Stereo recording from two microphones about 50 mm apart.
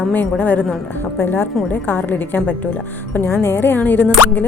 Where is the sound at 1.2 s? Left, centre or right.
Left.